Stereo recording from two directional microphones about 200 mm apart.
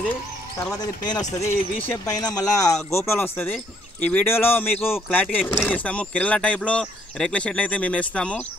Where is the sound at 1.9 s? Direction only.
15° left (ahead or behind).